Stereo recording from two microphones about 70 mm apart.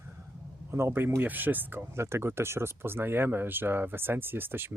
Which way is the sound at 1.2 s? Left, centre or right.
Right.